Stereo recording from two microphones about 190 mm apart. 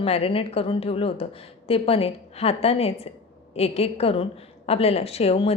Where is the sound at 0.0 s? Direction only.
30° left (ahead or behind).